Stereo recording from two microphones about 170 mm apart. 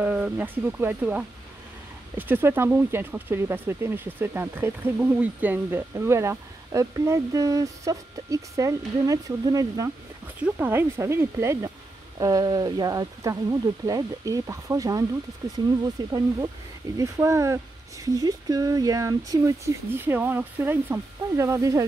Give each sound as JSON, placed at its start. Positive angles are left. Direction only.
{"t": 0.0, "sound": "speech", "side_deg": -10}
{"t": 10.2, "sound": "speech", "side_deg": -10}